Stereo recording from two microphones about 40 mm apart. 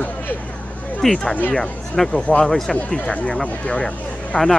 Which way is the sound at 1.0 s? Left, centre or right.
Centre.